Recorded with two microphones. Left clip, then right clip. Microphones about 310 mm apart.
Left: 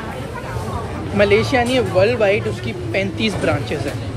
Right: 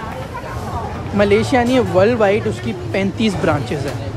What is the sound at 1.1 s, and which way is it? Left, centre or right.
A man's voice, centre.